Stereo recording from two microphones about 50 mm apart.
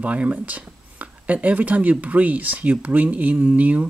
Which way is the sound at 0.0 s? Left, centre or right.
Right.